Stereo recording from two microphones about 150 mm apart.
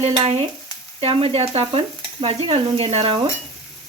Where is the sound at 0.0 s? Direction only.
45° right (ahead or behind).